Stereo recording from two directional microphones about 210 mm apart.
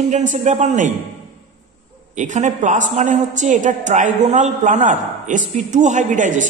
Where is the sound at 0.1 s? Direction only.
35° right (ahead or behind).